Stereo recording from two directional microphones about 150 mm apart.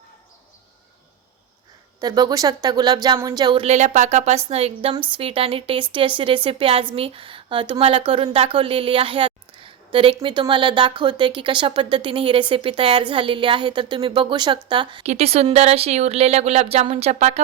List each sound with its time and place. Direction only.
2.0 s a woman's voice: 25° right (ahead or behind)
15.0 s speech: 45° right (ahead or behind)